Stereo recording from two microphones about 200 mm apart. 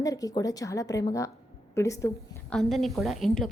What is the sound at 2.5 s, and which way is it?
Speech, centre (ahead or behind).